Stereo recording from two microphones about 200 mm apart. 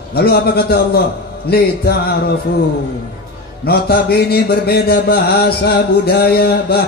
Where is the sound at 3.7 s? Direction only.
50° left (ahead or behind).